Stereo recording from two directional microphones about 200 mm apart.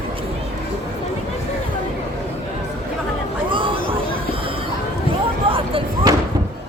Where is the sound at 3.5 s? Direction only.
25° right (ahead or behind).